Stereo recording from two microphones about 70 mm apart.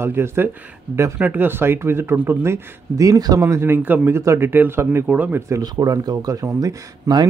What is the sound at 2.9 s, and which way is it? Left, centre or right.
Speech, right.